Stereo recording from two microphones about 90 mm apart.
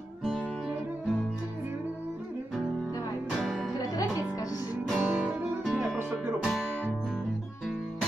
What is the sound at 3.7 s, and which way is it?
Music, 40° left (ahead or behind).